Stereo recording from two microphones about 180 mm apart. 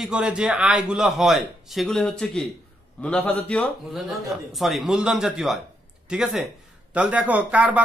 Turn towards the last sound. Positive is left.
turn(degrees=-5)  # may be behind; listen again after turning